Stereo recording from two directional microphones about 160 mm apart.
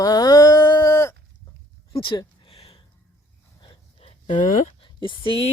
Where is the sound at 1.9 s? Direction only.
30° left (ahead or behind).